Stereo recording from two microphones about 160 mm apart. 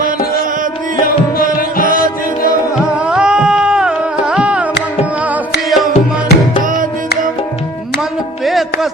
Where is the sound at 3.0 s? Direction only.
5° right (ahead or behind).